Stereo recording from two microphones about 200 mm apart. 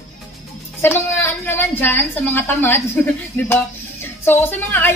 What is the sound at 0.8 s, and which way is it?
A woman's voice, 10° left (ahead or behind).